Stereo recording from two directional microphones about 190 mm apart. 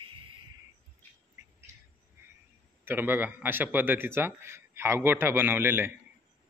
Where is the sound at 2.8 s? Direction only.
10° right (ahead or behind).